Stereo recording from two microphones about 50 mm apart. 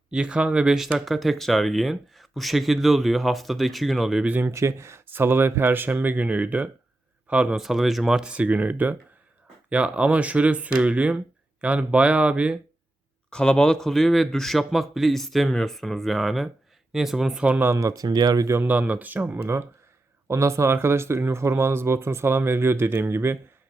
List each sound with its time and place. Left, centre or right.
0.1 s speech: centre
4.3 s speech: right
4.5 s speech: right
5.0 s speech: right
7.5 s speech: centre
8.3 s speech: right
13.3 s speech: centre
18.6 s speech: right
20.2 s speech: right